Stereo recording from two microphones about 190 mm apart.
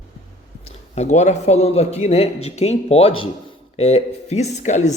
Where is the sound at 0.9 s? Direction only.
35° left (ahead or behind).